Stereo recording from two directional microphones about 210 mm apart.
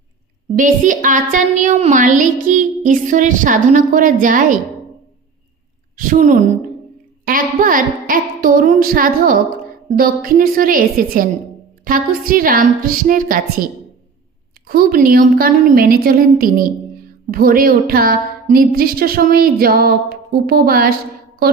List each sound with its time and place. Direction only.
0.5 s a woman's voice: 40° right (ahead or behind)
6.0 s a woman's voice: 40° right (ahead or behind)
14.7 s speech: 45° right (ahead or behind)